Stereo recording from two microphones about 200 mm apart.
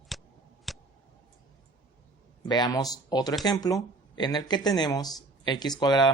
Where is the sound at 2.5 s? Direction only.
20° left (ahead or behind).